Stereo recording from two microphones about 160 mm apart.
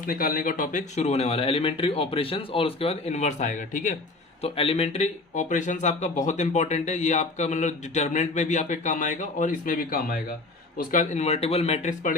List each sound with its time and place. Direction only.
0.0 s speech: 60° left (ahead or behind)
4.4 s speech: 35° left (ahead or behind); by 10.2 s 65° left (ahead or behind)
10.8 s speech: 50° left (ahead or behind)